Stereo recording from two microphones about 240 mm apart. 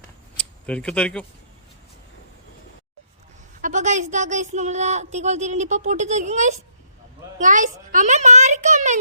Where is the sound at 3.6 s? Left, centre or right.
Right.